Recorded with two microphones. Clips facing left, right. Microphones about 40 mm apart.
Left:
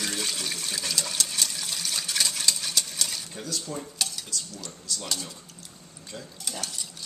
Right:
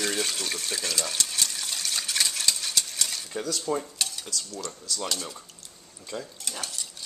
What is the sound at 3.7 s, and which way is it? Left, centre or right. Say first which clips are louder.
Dishes: right 10 dB; right.